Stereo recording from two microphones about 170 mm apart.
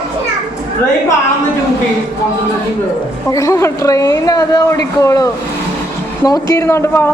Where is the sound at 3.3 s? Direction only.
20° left (ahead or behind).